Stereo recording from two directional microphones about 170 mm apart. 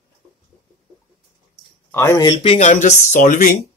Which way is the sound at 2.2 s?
35° left (ahead or behind).